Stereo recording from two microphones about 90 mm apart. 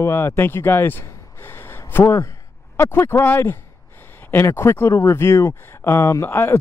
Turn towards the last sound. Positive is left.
turn(degrees=30)  # may be behind; listen again after turning